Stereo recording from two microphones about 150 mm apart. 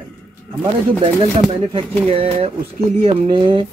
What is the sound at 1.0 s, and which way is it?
Speech, 35° right (ahead or behind).